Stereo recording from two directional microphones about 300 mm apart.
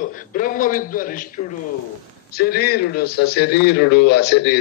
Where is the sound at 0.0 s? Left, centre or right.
Left.